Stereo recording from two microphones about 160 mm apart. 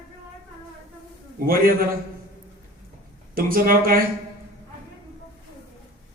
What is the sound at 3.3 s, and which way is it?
Speech, 65° right (ahead or behind).